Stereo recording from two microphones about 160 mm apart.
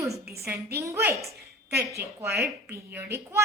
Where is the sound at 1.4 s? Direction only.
90° right.